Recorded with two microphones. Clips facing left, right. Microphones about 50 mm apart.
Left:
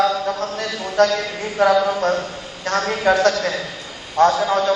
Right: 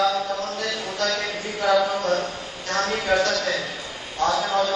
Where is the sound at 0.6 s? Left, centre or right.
Left.